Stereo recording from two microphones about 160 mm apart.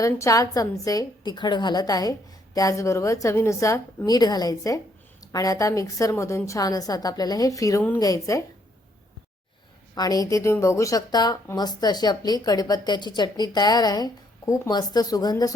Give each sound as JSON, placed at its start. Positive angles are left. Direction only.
{"t": 0.0, "sound": "speech", "side_deg": 20}
{"t": 9.9, "sound": "speech", "side_deg": 25}